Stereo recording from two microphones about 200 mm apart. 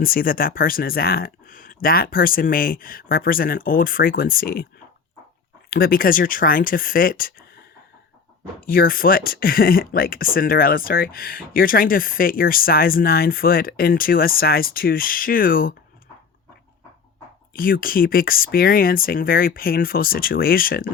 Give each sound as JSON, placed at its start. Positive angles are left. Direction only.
{"t": 0.0, "sound": "speech", "side_deg": 45}
{"t": 5.7, "sound": "speech", "side_deg": 45}
{"t": 17.5, "sound": "speech", "side_deg": 45}